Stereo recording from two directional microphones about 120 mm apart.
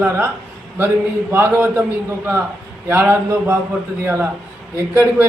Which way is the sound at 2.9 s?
20° right (ahead or behind).